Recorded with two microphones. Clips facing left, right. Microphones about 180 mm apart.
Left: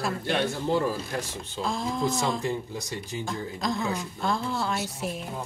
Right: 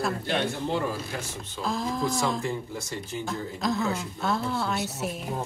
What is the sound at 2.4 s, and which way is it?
Speech, 20° left (ahead or behind).